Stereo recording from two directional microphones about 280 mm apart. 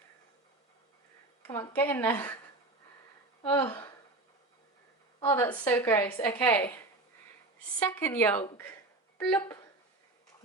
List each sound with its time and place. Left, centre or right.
1.4 s a woman's voice: centre
3.4 s speech: centre
5.2 s a woman's voice: centre
7.8 s a woman's voice: centre